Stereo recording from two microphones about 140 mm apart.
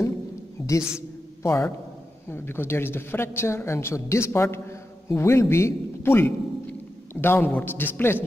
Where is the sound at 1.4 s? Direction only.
20° left (ahead or behind).